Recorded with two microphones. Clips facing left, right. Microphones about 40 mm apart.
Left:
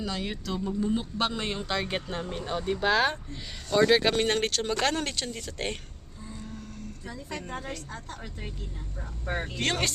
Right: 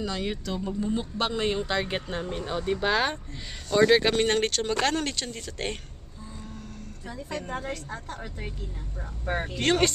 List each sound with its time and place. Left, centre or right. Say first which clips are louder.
0.0 s speech: right 2 dB; centre
7.4 s a woman's voice: right 3 dB; centre